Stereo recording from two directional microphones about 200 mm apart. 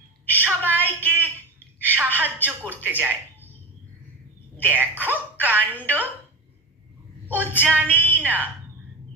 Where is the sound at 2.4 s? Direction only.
10° right (ahead or behind).